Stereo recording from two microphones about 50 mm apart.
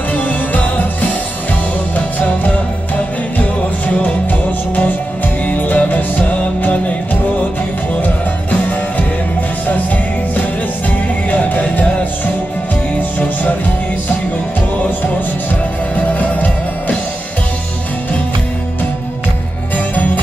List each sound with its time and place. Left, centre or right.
0.1 s music: left
4.0 s music: left
8.0 s music: left
11.2 s music: left
16.1 s music: left